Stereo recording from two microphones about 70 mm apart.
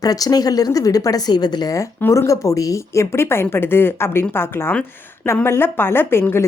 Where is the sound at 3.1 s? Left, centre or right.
Left.